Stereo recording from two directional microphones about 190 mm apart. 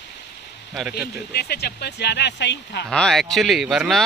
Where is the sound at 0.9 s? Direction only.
55° left (ahead or behind).